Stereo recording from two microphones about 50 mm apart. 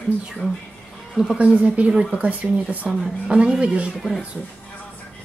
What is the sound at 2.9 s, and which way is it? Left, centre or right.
Speech, centre.